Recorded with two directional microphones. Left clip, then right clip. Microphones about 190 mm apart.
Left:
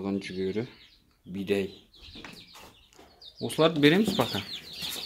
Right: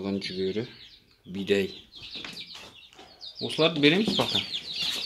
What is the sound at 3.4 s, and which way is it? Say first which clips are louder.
Speech: even; 25° left (ahead or behind).